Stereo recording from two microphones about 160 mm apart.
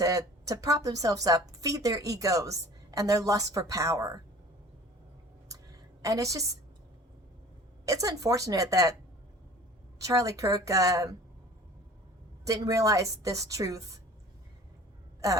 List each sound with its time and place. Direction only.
0.0 s speech: 20° right (ahead or behind)
6.0 s speech: 20° right (ahead or behind)
7.9 s speech: 20° right (ahead or behind)
10.0 s speech: 20° right (ahead or behind)
12.5 s speech: 20° right (ahead or behind)